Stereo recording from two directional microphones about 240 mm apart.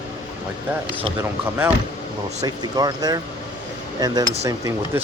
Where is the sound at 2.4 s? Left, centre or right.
Centre.